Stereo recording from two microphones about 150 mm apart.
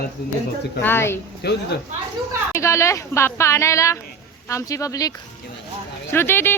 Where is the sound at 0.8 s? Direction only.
15° left (ahead or behind).